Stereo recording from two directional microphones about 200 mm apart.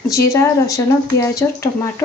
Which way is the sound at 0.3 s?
15° left (ahead or behind).